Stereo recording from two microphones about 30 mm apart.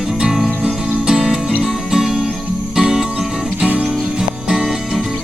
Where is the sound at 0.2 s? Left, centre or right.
Centre.